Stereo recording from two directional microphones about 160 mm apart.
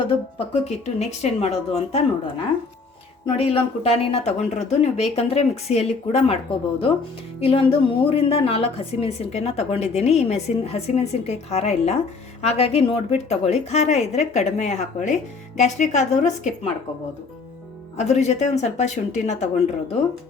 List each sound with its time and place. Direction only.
0.1 s a woman's voice: 35° left (ahead or behind)
3.3 s a woman's voice: 35° left (ahead or behind)
17.9 s a woman's voice: 45° left (ahead or behind)